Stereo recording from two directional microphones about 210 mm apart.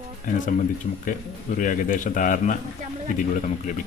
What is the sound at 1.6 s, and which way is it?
A man's voice, 40° left (ahead or behind).